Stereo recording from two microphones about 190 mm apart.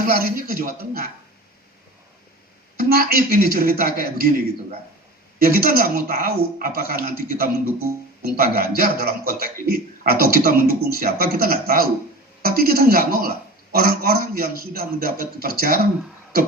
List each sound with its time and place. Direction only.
0.0 s a man's voice: 50° right (ahead or behind)
2.7 s a man's voice: 50° right (ahead or behind)